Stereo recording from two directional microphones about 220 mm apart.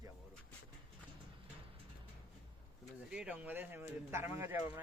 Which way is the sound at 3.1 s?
5° right (ahead or behind).